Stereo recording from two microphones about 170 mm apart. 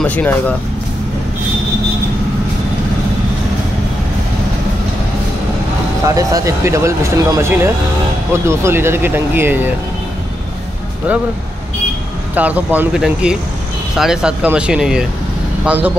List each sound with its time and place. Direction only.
0.0 s speech: 10° left (ahead or behind)
6.0 s speech: 20° right (ahead or behind)
12.4 s speech: 10° right (ahead or behind)